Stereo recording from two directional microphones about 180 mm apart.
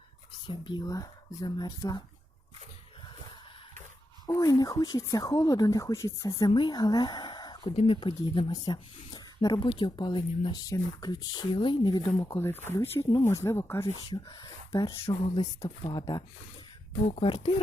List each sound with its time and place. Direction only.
0.4 s speech: 25° left (ahead or behind)
4.3 s speech: 20° left (ahead or behind)
17.1 s speech: 35° left (ahead or behind)